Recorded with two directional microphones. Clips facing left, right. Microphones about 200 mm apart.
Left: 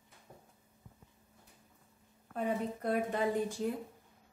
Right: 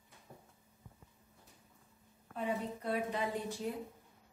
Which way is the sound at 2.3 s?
45° left (ahead or behind).